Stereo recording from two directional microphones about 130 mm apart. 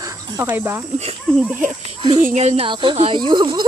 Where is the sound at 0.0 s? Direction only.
25° right (ahead or behind).